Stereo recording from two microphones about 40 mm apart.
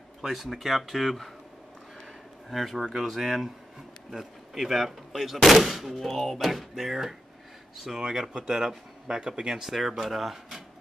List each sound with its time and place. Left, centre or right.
0.2 s speech: centre
2.5 s speech: centre